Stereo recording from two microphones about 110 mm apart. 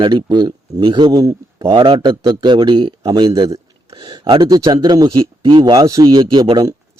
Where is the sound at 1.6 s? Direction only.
50° right (ahead or behind).